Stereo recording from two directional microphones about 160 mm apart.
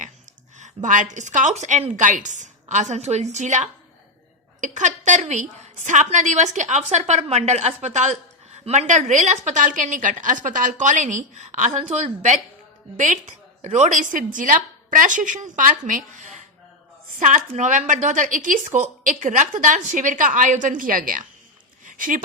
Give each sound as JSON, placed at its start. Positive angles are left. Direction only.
{"t": 0.6, "sound": "a woman's voice", "side_deg": -50}
{"t": 13.6, "sound": "a woman's voice", "side_deg": -50}
{"t": 21.8, "sound": "a sound", "side_deg": -55}